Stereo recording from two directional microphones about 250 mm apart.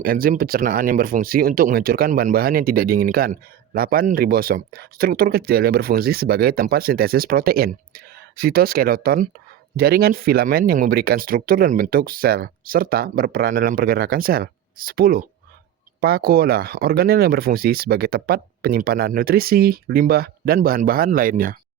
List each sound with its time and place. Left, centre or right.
0.0 s speech: right